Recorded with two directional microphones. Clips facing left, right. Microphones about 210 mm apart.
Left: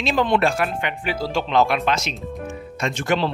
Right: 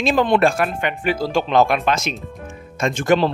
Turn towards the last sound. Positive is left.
turn(degrees=-50)  # may be behind; listen again after turning